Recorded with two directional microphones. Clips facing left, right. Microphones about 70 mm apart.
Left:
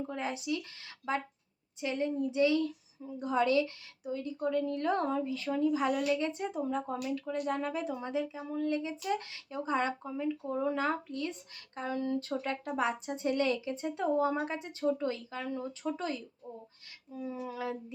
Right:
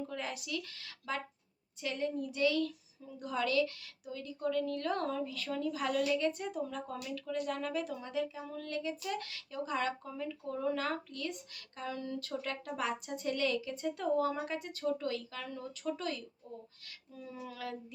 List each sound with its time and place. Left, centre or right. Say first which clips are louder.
0.1 s a woman's voice: left 5 dB; left